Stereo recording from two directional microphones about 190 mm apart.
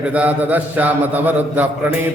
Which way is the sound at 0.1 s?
10° right (ahead or behind).